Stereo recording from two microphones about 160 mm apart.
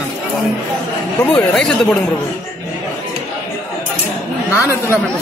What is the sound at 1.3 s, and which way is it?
Speech, 5° left (ahead or behind).